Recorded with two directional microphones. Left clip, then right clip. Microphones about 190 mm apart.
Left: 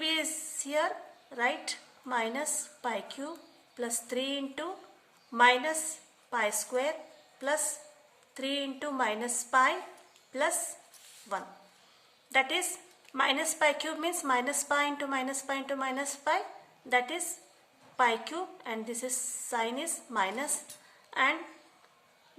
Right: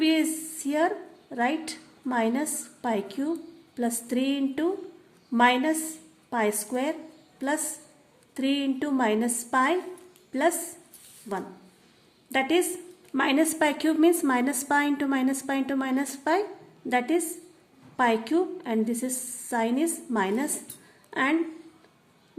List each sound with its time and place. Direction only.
0.0 s a sound: 15° right (ahead or behind)
1.4 s a woman's voice: 15° right (ahead or behind)
12.3 s a woman's voice: 20° right (ahead or behind)